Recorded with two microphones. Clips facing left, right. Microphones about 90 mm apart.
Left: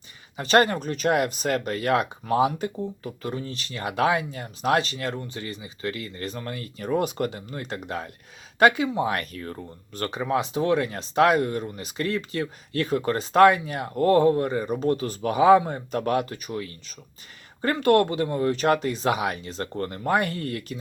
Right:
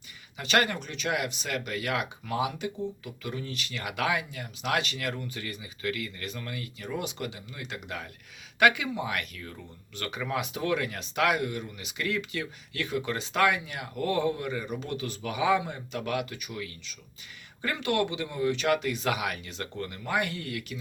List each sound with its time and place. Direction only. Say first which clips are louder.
0.3 s speech: left 7 dB; 35° left (ahead or behind)